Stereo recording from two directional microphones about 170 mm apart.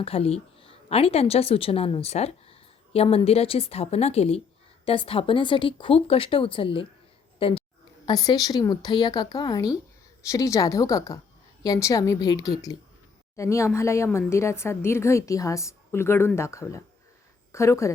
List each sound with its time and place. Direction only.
0.0 s a woman's voice: 35° left (ahead or behind)
7.3 s a sound: 35° left (ahead or behind)
8.0 s a woman's voice: 25° left (ahead or behind)